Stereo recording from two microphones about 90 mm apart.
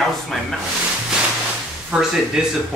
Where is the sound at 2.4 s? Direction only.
5° right (ahead or behind).